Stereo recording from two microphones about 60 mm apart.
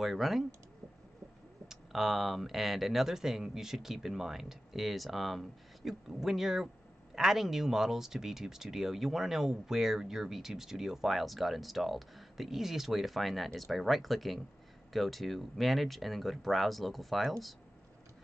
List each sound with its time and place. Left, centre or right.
0.0 s speech: centre
1.7 s speech: centre